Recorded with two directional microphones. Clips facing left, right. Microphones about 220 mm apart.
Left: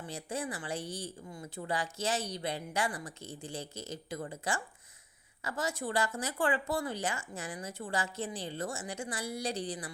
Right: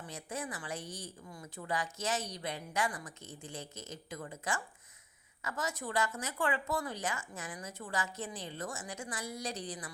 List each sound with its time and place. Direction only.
0.0 s speech: 30° left (ahead or behind)